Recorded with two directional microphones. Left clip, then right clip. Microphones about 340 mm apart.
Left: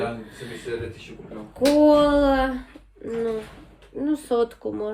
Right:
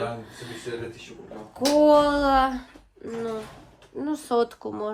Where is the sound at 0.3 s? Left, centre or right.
Centre.